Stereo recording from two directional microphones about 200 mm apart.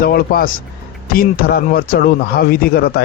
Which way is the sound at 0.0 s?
50° left (ahead or behind).